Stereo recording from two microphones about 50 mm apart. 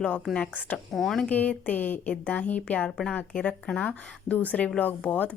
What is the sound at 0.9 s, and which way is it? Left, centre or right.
Speech, centre.